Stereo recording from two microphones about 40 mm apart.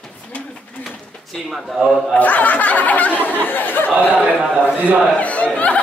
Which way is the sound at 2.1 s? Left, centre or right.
Left.